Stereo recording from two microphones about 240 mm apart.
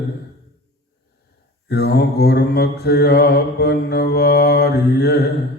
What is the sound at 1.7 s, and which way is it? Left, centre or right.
Mantra, left.